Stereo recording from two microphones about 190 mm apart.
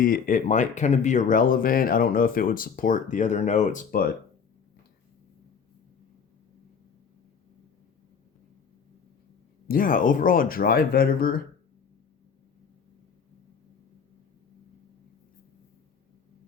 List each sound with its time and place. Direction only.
0.0 s speech: 45° left (ahead or behind)
9.6 s speech: 45° left (ahead or behind)